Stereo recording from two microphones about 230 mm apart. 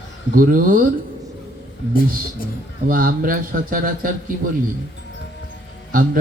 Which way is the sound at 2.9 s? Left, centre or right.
Right.